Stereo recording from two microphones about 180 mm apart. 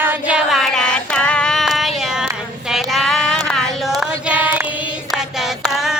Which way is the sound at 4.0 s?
5° right (ahead or behind).